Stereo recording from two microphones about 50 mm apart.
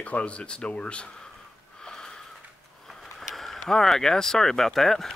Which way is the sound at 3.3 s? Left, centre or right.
Centre.